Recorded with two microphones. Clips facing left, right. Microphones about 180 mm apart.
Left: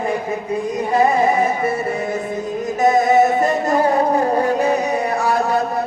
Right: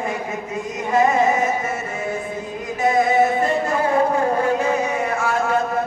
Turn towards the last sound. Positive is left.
turn(degrees=35)  # may be behind; listen again after turning